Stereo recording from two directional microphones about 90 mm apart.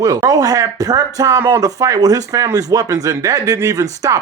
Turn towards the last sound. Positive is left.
turn(degrees=-40)  # may be behind; listen again after turning